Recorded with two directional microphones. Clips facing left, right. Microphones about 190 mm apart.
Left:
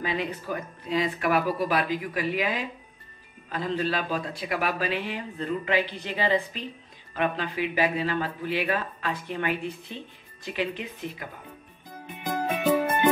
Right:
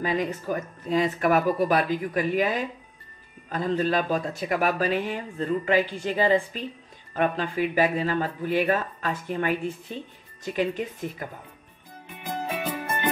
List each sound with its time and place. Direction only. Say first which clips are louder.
0.0 s speech: right 3 dB; 45° right (ahead or behind)